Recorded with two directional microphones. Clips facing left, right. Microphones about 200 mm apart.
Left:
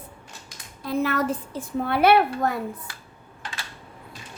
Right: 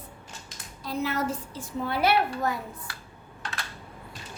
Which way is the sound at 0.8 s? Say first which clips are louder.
Left 5 dB; 55° left (ahead or behind).